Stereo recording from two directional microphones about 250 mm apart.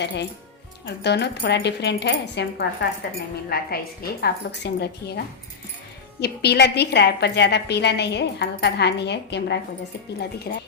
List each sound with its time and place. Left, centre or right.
0.0 s a woman's voice: left